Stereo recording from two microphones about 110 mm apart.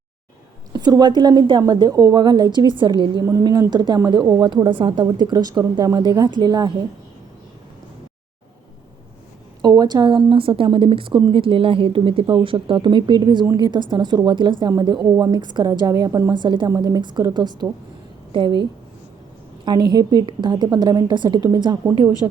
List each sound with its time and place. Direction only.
0.7 s a woman's voice: 40° right (ahead or behind)
9.6 s a woman's voice: 40° right (ahead or behind)
16.3 s a woman's voice: 45° right (ahead or behind)
16.6 s a woman's voice: 30° right (ahead or behind); by 18.6 s 50° right (ahead or behind)
19.6 s a woman's voice: 40° right (ahead or behind)